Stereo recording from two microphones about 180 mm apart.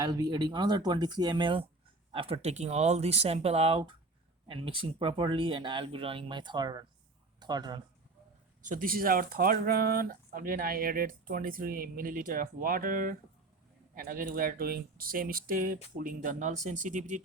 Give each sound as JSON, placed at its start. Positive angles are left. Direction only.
{"t": 0.0, "sound": "speech", "side_deg": -20}
{"t": 8.6, "sound": "speech", "side_deg": -50}